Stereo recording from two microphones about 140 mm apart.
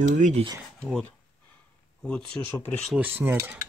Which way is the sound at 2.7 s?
5° left (ahead or behind).